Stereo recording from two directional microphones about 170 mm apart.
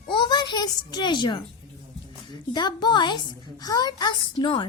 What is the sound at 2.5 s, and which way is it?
A woman's voice, 25° left (ahead or behind).